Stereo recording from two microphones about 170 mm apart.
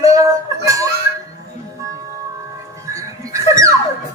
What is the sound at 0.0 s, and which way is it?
Music, 20° right (ahead or behind).